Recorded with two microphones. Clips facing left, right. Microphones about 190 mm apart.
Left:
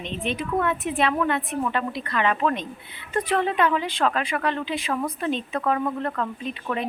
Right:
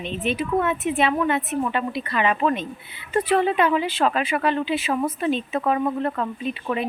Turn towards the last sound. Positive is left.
turn(degrees=-10)  # may be behind; listen again after turning